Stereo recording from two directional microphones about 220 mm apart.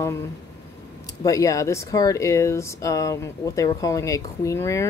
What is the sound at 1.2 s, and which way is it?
Speech, 15° left (ahead or behind).